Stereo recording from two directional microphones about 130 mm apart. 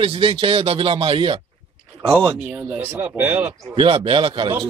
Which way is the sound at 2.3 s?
10° right (ahead or behind).